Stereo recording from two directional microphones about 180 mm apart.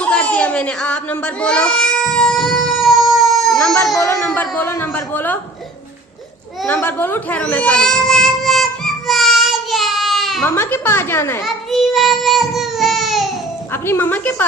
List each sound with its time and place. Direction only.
0.0 s speech: 5° left (ahead or behind)
3.9 s a woman's voice: 15° left (ahead or behind)
6.8 s baby cry: 10° left (ahead or behind)
10.4 s a woman's voice: 10° left (ahead or behind)
11.4 s a sound: centre (ahead or behind)
13.8 s a woman's voice: 10° left (ahead or behind)